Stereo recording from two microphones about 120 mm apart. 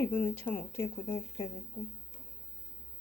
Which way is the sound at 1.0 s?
35° left (ahead or behind).